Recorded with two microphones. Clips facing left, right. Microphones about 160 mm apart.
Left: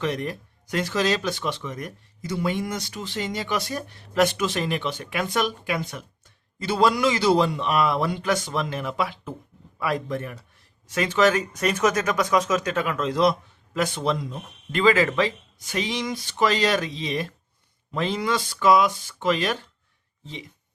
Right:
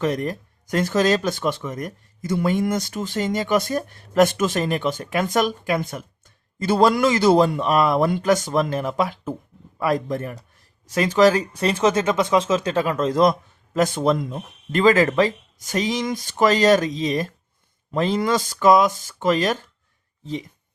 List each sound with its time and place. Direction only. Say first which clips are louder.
0.0 s speech: right 4 dB; 45° right (ahead or behind)